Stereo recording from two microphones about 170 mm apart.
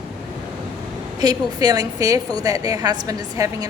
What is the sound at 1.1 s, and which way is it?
A woman's voice, 25° right (ahead or behind).